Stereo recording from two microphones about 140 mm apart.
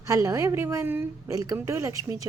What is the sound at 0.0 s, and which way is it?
A woman's voice, 25° right (ahead or behind).